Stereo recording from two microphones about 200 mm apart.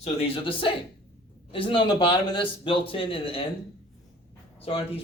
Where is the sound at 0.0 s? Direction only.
30° left (ahead or behind).